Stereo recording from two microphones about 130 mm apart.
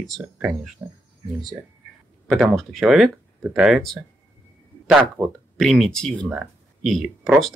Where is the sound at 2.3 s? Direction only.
Centre (ahead or behind).